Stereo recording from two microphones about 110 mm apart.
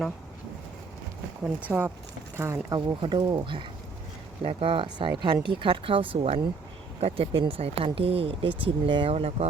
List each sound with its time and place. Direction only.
1.5 s speech: 15° right (ahead or behind)
2.7 s speech: 45° right (ahead or behind); by 9.5 s 60° right (ahead or behind)